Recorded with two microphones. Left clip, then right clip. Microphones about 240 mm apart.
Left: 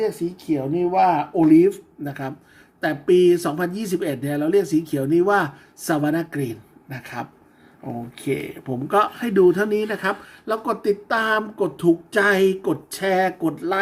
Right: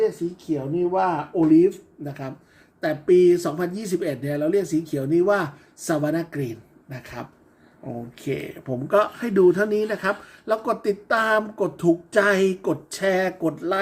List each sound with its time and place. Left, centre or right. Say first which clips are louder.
0.7 s speech: left 4 dB; left
8.3 s speech: left 2 dB; centre